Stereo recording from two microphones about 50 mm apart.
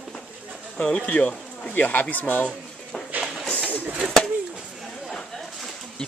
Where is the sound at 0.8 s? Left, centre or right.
Centre.